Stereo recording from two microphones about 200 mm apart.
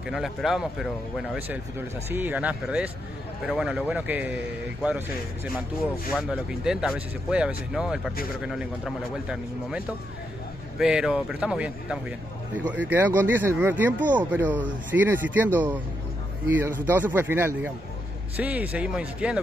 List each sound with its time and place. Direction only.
0.1 s speech: centre (ahead or behind)